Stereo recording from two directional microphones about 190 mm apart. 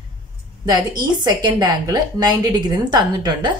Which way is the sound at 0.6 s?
20° right (ahead or behind).